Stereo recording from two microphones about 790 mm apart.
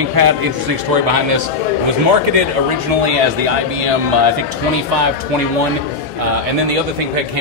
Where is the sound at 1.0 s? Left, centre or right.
Right.